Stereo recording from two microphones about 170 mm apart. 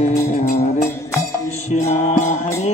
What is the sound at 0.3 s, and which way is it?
Music, 45° left (ahead or behind).